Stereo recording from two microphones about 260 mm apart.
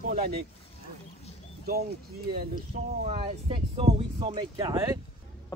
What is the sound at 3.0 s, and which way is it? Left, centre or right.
Speech, right.